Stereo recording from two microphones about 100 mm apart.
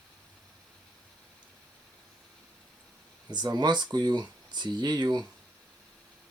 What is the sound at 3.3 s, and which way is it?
Speech, 45° right (ahead or behind).